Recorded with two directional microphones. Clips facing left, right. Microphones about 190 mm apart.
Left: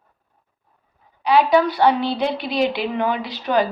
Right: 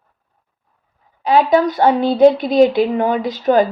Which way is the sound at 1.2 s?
50° right (ahead or behind).